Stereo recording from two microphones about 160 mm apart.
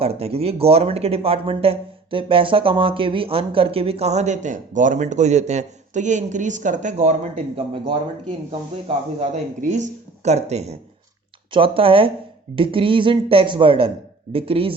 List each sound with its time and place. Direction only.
0.0 s speech: 40° right (ahead or behind)
9.6 s speech: 50° right (ahead or behind)